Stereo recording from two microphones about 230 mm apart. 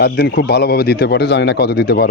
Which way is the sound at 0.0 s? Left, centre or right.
Left.